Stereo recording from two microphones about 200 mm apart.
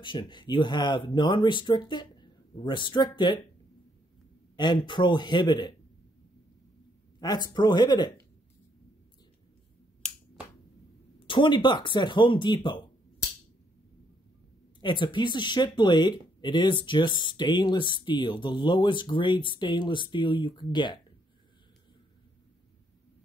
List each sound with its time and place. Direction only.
0.0 s speech: 25° left (ahead or behind)
4.6 s speech: 20° left (ahead or behind)
7.2 s speech: 20° left (ahead or behind)
11.1 s speech: 25° left (ahead or behind)
14.8 s speech: 25° left (ahead or behind)